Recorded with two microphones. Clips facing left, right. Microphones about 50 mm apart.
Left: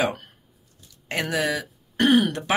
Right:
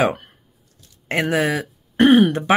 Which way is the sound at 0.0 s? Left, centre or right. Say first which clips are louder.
Right 5 dB; right.